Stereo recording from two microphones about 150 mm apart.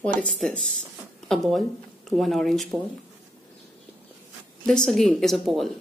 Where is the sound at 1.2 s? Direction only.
Centre (ahead or behind).